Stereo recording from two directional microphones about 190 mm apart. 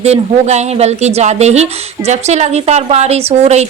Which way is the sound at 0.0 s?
35° right (ahead or behind).